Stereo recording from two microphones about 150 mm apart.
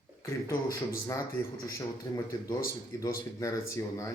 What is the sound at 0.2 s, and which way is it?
Speech, 20° left (ahead or behind).